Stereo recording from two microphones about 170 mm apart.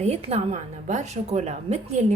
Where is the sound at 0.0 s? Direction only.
40° right (ahead or behind).